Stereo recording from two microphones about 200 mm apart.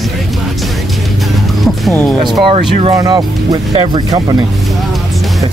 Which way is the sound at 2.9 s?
20° right (ahead or behind).